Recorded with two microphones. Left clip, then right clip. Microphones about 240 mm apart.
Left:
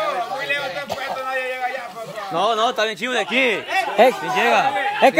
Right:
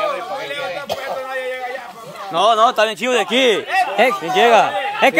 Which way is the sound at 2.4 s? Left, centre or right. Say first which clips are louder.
Right 6 dB; centre.